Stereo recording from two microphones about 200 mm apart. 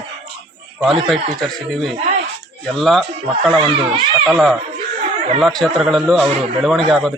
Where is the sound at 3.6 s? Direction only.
25° right (ahead or behind).